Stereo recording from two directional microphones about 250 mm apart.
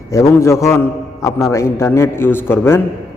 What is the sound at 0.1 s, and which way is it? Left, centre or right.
A man's voice, centre.